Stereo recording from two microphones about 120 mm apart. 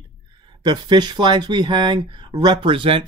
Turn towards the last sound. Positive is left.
turn(degrees=-50)  # may be behind; listen again after turning